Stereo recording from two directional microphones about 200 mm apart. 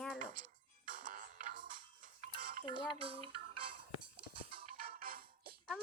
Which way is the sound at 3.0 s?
25° right (ahead or behind).